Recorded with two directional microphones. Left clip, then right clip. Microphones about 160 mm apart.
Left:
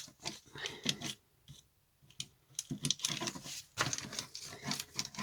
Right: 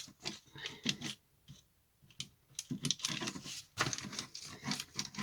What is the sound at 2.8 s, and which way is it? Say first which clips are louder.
Patter: left 1 dB; centre (ahead or behind).